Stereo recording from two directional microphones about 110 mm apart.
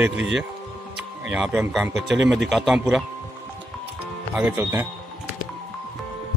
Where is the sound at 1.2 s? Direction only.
5° right (ahead or behind).